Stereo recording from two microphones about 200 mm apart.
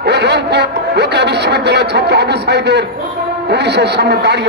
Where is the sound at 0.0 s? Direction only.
55° right (ahead or behind).